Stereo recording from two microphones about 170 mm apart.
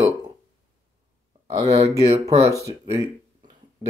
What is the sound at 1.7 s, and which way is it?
Speech, 15° right (ahead or behind).